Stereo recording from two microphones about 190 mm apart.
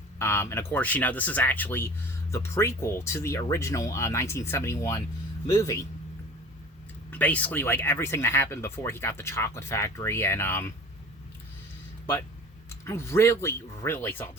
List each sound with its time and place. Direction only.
0.2 s speech: 15° left (ahead or behind)
7.1 s speech: 10° left (ahead or behind)
12.8 s speech: 15° left (ahead or behind)